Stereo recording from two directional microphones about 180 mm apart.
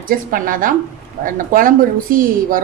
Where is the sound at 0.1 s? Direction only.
50° right (ahead or behind).